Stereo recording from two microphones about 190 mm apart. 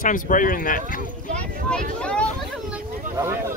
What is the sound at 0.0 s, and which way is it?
Speech, 45° left (ahead or behind).